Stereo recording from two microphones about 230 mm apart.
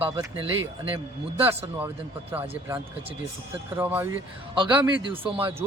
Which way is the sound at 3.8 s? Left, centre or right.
Centre.